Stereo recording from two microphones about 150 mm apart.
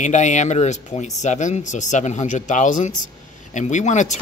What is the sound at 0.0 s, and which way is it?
Speech, 55° left (ahead or behind).